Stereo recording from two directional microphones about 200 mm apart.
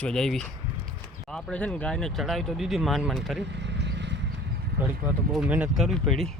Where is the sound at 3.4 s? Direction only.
60° right (ahead or behind).